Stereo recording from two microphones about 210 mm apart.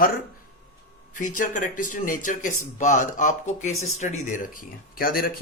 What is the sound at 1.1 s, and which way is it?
Speech, 40° left (ahead or behind).